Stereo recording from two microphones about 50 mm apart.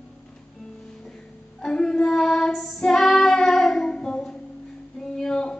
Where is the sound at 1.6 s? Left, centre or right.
Centre.